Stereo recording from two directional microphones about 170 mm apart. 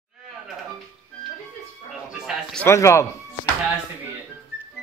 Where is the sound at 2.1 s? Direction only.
Centre (ahead or behind).